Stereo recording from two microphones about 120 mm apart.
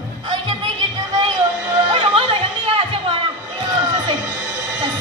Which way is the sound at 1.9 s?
45° right (ahead or behind).